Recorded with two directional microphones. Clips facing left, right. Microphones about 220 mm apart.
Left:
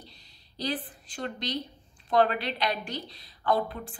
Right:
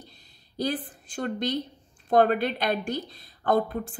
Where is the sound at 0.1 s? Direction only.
50° right (ahead or behind).